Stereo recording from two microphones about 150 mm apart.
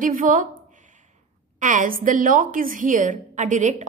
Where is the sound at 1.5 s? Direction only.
60° right (ahead or behind).